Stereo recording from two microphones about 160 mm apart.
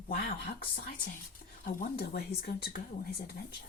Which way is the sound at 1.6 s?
65° left (ahead or behind).